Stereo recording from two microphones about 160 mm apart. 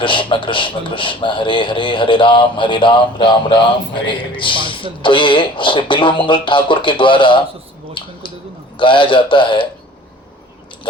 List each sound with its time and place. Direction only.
0.0 s speech: 30° left (ahead or behind)
8.8 s speech: 30° left (ahead or behind)